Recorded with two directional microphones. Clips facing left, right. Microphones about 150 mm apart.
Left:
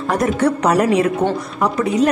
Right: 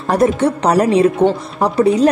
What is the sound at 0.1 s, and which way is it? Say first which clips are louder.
A woman's voice: right 3 dB; 30° right (ahead or behind).